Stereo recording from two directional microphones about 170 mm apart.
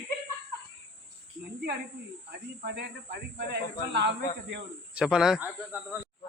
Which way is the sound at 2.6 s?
75° right (ahead or behind).